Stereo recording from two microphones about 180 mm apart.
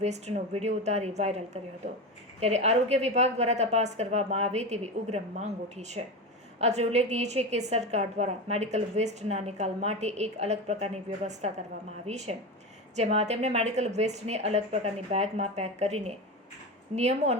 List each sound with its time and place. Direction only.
0.0 s a woman's voice: 35° right (ahead or behind)
2.4 s a woman's voice: 35° right (ahead or behind)